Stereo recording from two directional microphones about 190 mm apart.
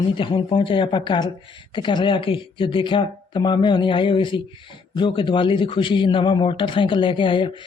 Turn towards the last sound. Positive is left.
turn(degrees=25)  # may be behind; listen again after turning